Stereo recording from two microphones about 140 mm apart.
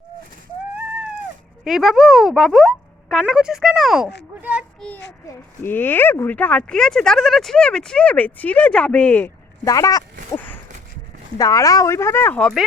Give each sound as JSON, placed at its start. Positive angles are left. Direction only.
{"t": 1.6, "sound": "speech", "side_deg": 0}
{"t": 4.4, "sound": "a sound", "side_deg": -10}
{"t": 5.6, "sound": "speech", "side_deg": 15}
{"t": 9.6, "sound": "speech", "side_deg": 25}
{"t": 10.3, "sound": "a sound", "side_deg": 10}
{"t": 11.3, "sound": "speech", "side_deg": 25}